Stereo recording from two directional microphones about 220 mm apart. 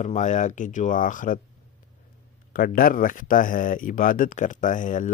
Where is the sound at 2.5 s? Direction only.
40° left (ahead or behind).